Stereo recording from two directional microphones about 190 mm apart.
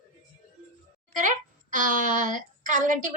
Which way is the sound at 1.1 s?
45° right (ahead or behind).